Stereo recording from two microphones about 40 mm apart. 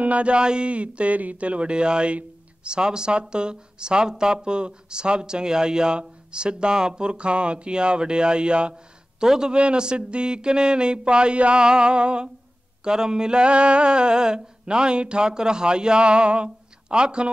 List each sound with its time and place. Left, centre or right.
0.0 s speech: right